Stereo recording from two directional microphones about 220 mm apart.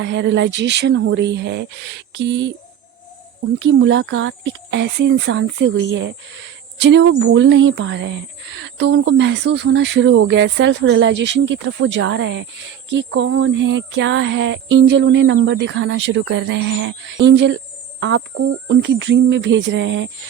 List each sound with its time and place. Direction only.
0.0 s speech: 55° right (ahead or behind)
3.6 s speech: 55° right (ahead or behind)